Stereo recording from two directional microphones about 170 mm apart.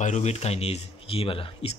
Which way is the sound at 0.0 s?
40° left (ahead or behind).